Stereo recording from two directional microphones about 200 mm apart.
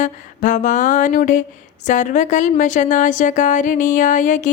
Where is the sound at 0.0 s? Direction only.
40° left (ahead or behind).